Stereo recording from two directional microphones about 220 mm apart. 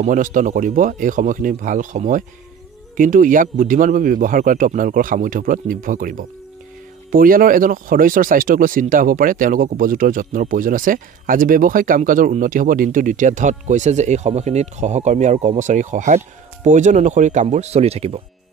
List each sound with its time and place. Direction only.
0.0 s speech: 35° right (ahead or behind)